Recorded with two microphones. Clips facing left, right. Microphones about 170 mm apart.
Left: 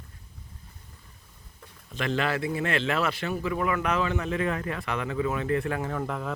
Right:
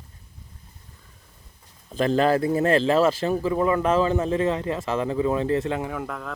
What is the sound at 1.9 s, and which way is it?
Speech, 35° right (ahead or behind).